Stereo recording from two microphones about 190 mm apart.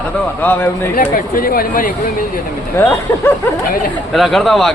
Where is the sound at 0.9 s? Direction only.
50° left (ahead or behind).